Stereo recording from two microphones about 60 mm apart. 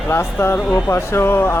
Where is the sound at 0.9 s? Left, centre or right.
Left.